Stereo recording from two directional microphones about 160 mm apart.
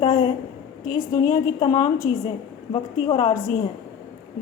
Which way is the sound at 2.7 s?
35° left (ahead or behind).